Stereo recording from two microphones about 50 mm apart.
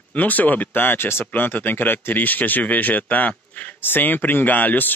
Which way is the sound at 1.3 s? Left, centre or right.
Left.